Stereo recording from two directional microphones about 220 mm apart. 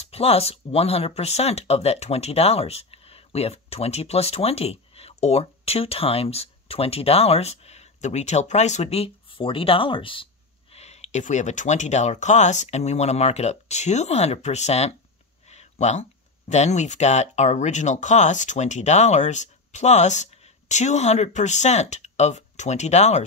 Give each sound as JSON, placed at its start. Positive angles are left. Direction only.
{"t": 0.0, "sound": "speech", "side_deg": 25}